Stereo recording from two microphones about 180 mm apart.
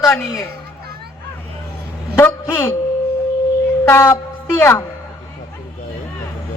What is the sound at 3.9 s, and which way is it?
Speech, 15° left (ahead or behind).